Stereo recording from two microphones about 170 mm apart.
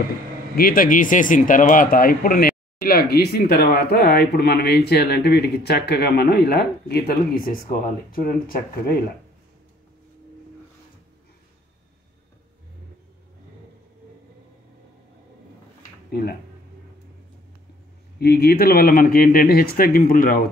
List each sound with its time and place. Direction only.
0.6 s speech: 55° left (ahead or behind)
16.1 s speech: 65° left (ahead or behind)
18.2 s speech: 65° left (ahead or behind)